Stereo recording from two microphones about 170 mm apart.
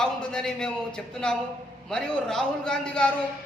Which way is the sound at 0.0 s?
5° left (ahead or behind).